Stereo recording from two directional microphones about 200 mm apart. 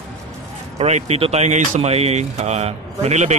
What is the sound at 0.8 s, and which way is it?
Speech, 35° right (ahead or behind).